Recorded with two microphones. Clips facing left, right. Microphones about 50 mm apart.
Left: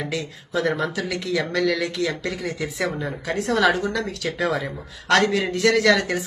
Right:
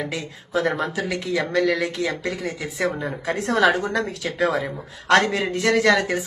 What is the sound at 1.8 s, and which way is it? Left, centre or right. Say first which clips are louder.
Speech: even; centre.